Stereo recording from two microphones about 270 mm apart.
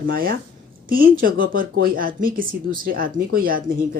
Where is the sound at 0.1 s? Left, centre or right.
Right.